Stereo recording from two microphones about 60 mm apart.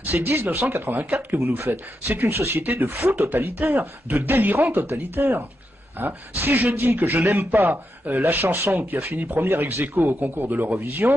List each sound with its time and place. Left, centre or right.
0.0 s speech: right